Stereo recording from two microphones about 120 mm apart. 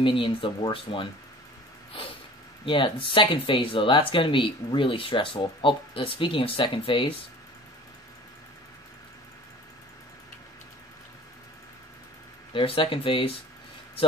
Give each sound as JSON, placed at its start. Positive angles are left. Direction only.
{"t": 0.0, "sound": "speech", "side_deg": 45}
{"t": 2.6, "sound": "speech", "side_deg": 45}
{"t": 12.5, "sound": "speech", "side_deg": 45}